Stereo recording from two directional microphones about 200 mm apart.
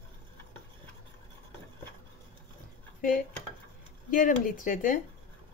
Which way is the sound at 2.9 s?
45° left (ahead or behind).